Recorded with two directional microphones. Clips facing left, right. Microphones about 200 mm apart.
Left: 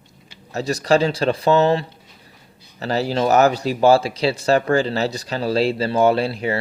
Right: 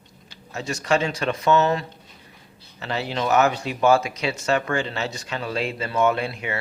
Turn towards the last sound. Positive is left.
turn(degrees=35)  # may be behind; listen again after turning